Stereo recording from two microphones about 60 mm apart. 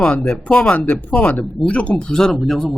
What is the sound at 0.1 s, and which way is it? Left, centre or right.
Speech, left.